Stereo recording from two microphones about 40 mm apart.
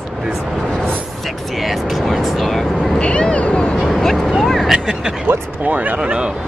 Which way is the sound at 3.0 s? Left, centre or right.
Left.